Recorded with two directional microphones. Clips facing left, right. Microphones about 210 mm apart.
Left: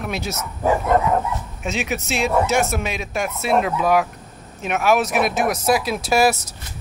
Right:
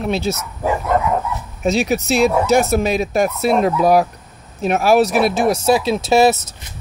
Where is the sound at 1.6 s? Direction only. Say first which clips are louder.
Right 8 dB; 35° right (ahead or behind).